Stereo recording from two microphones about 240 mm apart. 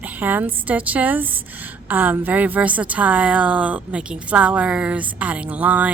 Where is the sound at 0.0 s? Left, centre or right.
Centre.